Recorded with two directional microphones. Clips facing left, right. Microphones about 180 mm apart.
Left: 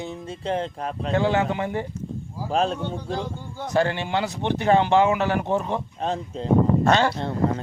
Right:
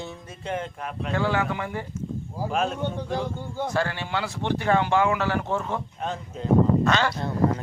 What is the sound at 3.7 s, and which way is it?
Speech, 20° left (ahead or behind).